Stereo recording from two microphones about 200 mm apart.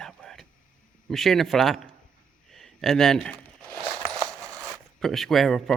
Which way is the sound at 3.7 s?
Centre (ahead or behind).